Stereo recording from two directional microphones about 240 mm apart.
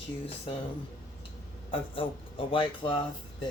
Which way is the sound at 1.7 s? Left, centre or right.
Left.